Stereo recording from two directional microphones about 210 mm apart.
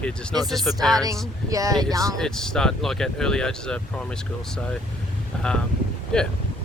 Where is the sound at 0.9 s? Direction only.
15° right (ahead or behind).